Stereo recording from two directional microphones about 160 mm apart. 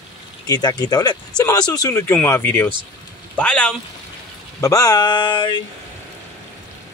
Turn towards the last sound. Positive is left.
turn(degrees=30)  # may be behind; listen again after turning